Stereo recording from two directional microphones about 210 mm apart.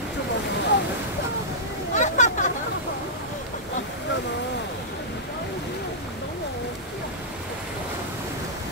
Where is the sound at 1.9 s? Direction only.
35° left (ahead or behind).